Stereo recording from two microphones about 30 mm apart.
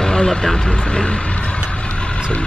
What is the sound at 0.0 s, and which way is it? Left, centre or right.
Speech, left.